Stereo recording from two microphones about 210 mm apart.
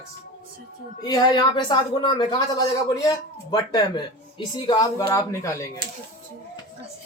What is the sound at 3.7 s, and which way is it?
Speech, 20° left (ahead or behind).